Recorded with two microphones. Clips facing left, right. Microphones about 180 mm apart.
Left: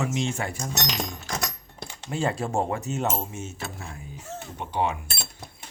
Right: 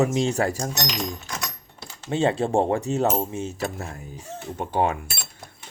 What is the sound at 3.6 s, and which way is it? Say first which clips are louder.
Speech: right 7 dB; 45° right (ahead or behind).